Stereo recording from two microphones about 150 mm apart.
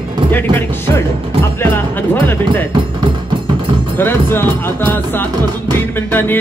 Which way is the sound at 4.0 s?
15° left (ahead or behind).